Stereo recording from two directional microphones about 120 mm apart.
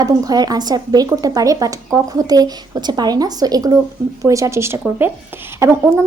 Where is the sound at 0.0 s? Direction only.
35° right (ahead or behind).